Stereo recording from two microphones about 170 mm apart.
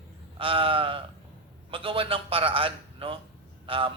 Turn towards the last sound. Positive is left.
turn(degrees=-30)  # may be behind; listen again after turning